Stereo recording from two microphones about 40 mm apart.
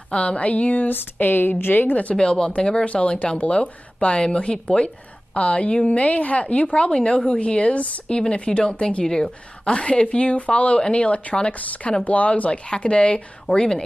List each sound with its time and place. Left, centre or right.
0.1 s a woman's voice: left
1.2 s a woman's voice: left
2.1 s speech: left
2.8 s a woman's voice: left
9.7 s a woman's voice: left
12.6 s speech: left